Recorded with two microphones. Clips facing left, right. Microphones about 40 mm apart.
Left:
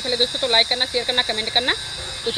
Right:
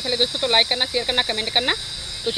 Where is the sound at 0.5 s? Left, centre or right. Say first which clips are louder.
Even; centre.